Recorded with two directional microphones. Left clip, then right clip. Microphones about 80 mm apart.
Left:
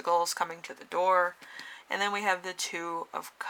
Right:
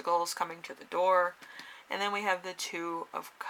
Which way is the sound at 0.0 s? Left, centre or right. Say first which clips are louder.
Left 3 dB; left.